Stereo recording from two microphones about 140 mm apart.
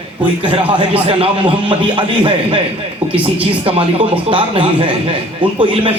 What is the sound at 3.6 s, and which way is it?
A man's voice, 40° right (ahead or behind).